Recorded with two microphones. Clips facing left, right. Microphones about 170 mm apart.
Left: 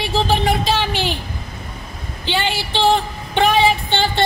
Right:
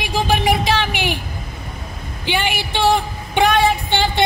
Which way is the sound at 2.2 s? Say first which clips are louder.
Even; 15° right (ahead or behind).